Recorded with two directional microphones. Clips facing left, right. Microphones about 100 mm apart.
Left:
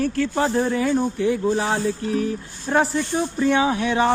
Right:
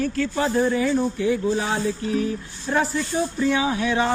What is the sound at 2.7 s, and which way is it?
Speech, 55° left (ahead or behind).